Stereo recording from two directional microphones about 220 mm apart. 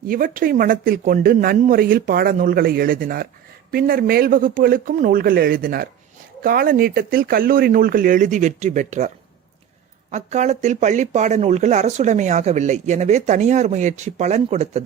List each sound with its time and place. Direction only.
0.1 s speech: 40° right (ahead or behind)
10.1 s speech: 30° right (ahead or behind)